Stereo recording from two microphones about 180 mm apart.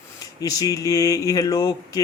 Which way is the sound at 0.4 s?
20° left (ahead or behind).